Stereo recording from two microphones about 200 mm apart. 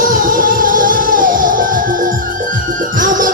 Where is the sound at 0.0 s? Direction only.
45° right (ahead or behind).